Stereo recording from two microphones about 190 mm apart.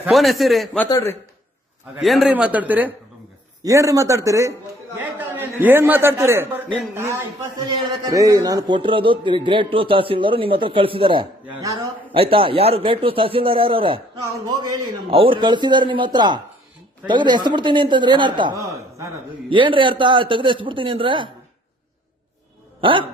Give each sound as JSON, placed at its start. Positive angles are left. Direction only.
{"t": 0.0, "sound": "a man's voice", "side_deg": 0}
{"t": 0.9, "sound": "a man's voice", "side_deg": 20}
{"t": 2.0, "sound": "a man's voice", "side_deg": 0}
{"t": 11.4, "sound": "speech", "side_deg": -15}
{"t": 12.1, "sound": "a man's voice", "side_deg": -30}
{"t": 15.1, "sound": "a man's voice", "side_deg": -25}
{"t": 22.8, "sound": "a man's voice", "side_deg": -25}